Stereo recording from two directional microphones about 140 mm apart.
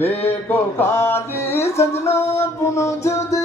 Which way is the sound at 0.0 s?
15° left (ahead or behind).